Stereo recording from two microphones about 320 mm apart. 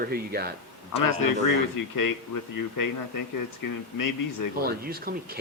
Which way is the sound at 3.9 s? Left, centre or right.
Left.